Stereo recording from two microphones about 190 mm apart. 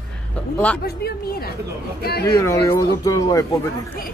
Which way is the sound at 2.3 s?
15° left (ahead or behind).